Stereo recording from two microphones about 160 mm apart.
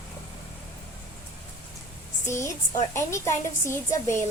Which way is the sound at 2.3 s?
15° left (ahead or behind).